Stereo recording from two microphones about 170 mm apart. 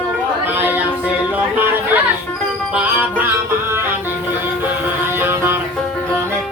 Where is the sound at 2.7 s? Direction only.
10° right (ahead or behind).